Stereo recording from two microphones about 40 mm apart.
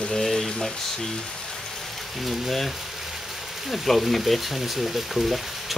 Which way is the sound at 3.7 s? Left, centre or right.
Centre.